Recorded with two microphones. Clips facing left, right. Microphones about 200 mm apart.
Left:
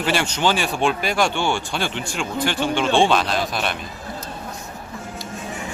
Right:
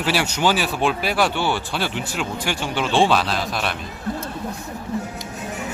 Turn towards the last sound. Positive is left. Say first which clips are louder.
# left 1 dB
turn(degrees=0)  # may be behind; listen again after turning